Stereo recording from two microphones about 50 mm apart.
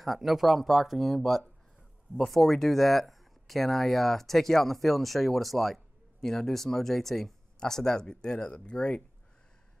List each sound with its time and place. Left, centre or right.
0.0 s speech: centre